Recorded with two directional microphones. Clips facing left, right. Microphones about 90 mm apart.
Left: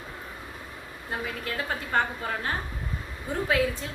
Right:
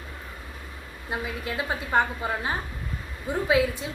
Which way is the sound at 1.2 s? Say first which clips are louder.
Right 1 dB; 15° right (ahead or behind).